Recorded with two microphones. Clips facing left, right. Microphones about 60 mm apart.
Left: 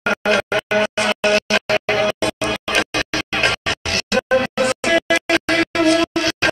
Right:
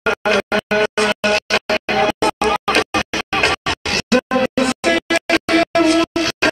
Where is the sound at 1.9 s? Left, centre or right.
Right.